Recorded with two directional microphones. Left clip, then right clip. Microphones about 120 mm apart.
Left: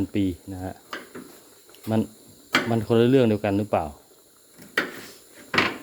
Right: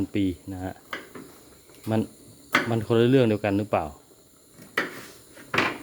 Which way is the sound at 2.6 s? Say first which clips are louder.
Left 3 dB; 5° right (ahead or behind).